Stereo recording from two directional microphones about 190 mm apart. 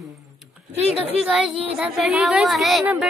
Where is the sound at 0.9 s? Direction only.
5° right (ahead or behind).